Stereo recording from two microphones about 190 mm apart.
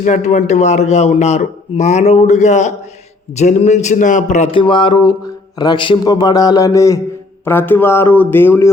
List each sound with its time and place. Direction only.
0.0 s a man's voice: 40° left (ahead or behind)
4.5 s speech: 25° left (ahead or behind)